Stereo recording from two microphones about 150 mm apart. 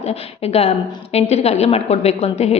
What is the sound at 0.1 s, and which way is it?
A woman's voice, 45° left (ahead or behind).